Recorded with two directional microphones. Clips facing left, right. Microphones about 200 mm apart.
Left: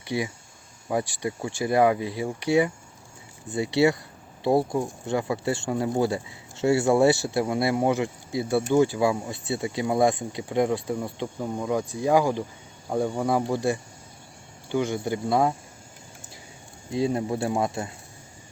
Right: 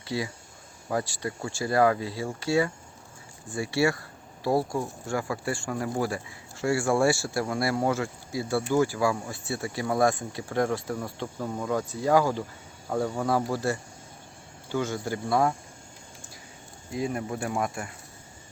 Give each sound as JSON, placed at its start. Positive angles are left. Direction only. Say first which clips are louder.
{"t": 0.0, "sound": "speech", "louder": "left 3 dB", "side_deg": 20}
{"t": 16.9, "sound": "speech", "louder": "left 5 dB", "side_deg": 25}